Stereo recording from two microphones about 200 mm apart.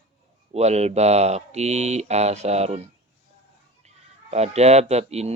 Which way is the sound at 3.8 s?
35° right (ahead or behind).